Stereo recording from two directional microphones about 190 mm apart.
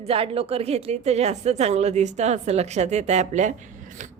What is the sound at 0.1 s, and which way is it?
A woman's voice, 30° right (ahead or behind).